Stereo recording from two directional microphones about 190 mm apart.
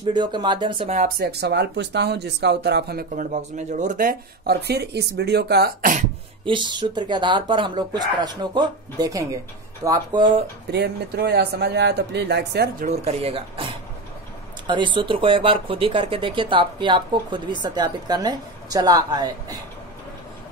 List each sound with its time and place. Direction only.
0.0 s speech: 25° right (ahead or behind)
1.2 s speech: 60° right (ahead or behind)
3.3 s speech: 40° right (ahead or behind)
6.4 s speech: 25° right (ahead or behind)
10.7 s speech: 60° right (ahead or behind)
12.8 s speech: 35° right (ahead or behind)
14.7 s speech: 25° right (ahead or behind)